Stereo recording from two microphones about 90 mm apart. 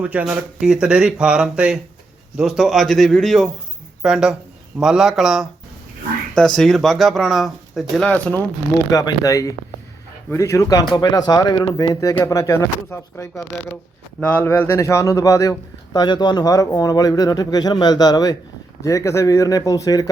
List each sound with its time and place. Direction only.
0.0 s speech: 15° right (ahead or behind)
6.3 s speech: 10° left (ahead or behind)
8.0 s speech: 15° left (ahead or behind)
8.9 s a man's voice: 45° left (ahead or behind)
10.9 s a man's voice: 50° left (ahead or behind); by 13.4 s 35° left (ahead or behind)
14.2 s a man's voice: 15° left (ahead or behind); by 16.0 s 40° left (ahead or behind)
16.0 s speech: 55° left (ahead or behind)
18.8 s a man's voice: 35° left (ahead or behind)